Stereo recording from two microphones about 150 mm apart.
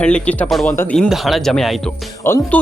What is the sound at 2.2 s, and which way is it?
Speech, 15° left (ahead or behind).